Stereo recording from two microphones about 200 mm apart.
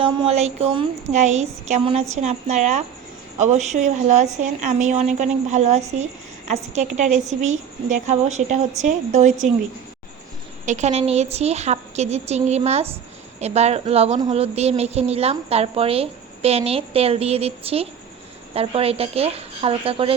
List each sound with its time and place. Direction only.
0.0 s a woman's voice: 30° right (ahead or behind)
10.7 s a woman's voice: 35° right (ahead or behind)